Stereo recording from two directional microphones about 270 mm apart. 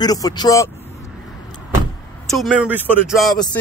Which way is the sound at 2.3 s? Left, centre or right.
Centre.